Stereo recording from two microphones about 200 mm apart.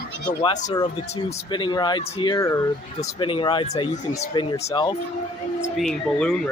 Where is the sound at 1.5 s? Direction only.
20° left (ahead or behind).